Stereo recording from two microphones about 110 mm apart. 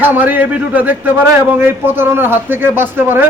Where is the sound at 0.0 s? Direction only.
15° right (ahead or behind).